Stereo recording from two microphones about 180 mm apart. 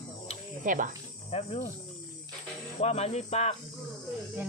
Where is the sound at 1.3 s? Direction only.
35° left (ahead or behind).